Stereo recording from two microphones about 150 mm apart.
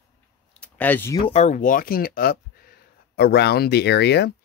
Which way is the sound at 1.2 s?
45° left (ahead or behind).